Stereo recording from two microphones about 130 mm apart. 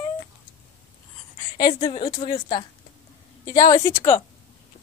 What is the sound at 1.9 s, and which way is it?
Speech, 40° left (ahead or behind).